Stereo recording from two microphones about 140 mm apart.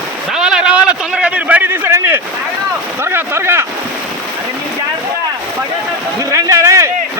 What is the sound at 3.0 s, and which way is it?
Speech, 15° right (ahead or behind).